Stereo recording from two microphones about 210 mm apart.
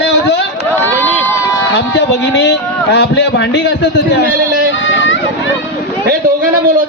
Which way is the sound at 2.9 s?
55° left (ahead or behind).